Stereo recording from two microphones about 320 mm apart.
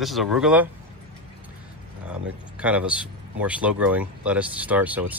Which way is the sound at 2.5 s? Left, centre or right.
Centre.